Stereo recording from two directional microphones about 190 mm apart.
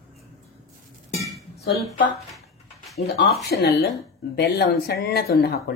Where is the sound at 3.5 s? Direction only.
60° left (ahead or behind).